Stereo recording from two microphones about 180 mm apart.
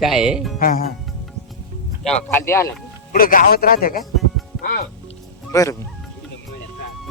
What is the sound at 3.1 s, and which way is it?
Speech, 50° left (ahead or behind).